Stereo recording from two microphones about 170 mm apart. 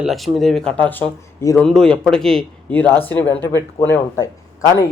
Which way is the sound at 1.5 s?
5° left (ahead or behind).